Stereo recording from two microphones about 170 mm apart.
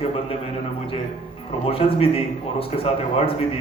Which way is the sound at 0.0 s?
35° left (ahead or behind).